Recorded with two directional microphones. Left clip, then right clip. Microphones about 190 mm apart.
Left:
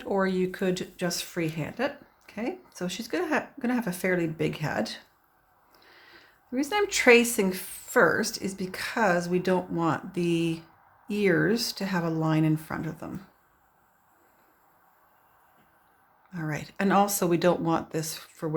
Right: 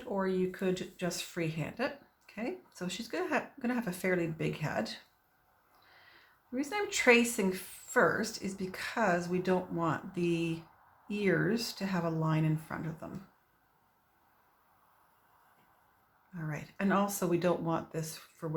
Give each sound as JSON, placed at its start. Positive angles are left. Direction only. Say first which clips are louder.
{"t": 0.0, "sound": "speech", "louder": "left 6 dB", "side_deg": 45}
{"t": 16.3, "sound": "speech", "louder": "left 8 dB", "side_deg": 45}